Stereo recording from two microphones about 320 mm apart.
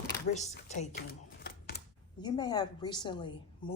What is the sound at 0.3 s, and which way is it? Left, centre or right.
Speech, left.